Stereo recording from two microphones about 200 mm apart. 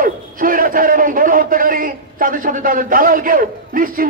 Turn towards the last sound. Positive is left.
turn(degrees=-45)  # may be behind; listen again after turning